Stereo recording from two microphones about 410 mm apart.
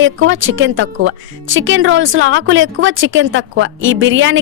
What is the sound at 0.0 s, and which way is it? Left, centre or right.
Speech, right.